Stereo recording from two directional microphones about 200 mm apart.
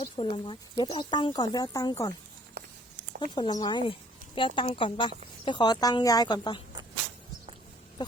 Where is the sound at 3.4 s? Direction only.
20° left (ahead or behind).